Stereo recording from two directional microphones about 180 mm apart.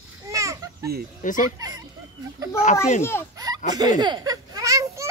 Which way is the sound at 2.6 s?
40° left (ahead or behind).